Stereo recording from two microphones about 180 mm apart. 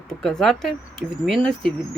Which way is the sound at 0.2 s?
Centre (ahead or behind).